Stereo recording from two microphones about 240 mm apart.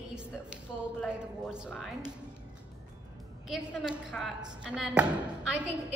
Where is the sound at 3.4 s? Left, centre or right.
Centre.